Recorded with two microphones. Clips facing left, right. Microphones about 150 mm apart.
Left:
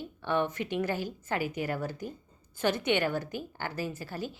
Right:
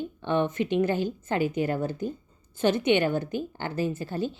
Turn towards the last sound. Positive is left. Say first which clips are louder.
# right 7 dB
turn(degrees=-25)  # may be behind; listen again after turning